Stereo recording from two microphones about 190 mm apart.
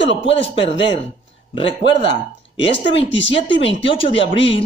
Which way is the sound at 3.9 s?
30° left (ahead or behind).